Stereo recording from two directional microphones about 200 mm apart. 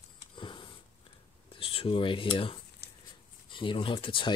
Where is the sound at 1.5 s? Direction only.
25° left (ahead or behind).